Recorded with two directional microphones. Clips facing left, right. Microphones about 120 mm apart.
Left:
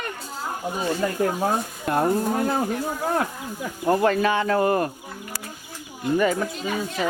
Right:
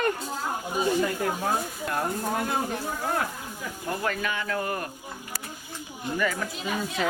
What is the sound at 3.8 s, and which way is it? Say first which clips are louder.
Speech: left 10 dB; 40° left (ahead or behind).